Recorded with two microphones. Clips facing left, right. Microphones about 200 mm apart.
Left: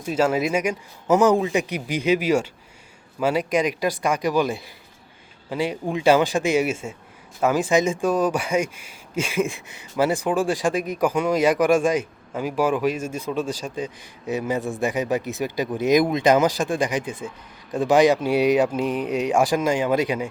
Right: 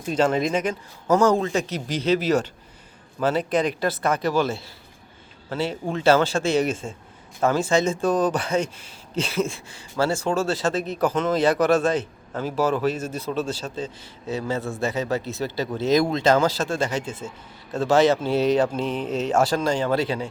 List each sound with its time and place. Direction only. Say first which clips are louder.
0.0 s a man's voice: even; 5° left (ahead or behind)